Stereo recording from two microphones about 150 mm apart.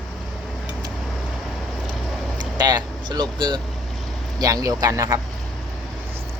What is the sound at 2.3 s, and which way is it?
Speech, 30° right (ahead or behind).